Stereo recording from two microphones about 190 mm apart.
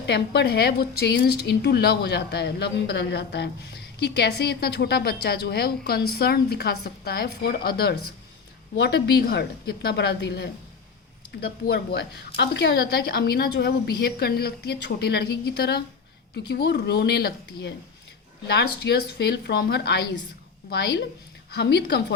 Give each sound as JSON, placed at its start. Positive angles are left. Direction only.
{"t": 0.0, "sound": "a woman's voice", "side_deg": 65}